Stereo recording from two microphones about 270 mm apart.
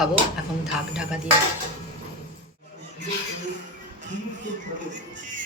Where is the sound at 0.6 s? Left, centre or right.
Centre.